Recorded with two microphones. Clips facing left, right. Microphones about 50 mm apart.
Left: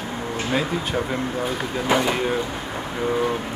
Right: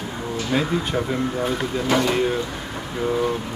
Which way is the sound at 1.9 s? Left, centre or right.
Centre.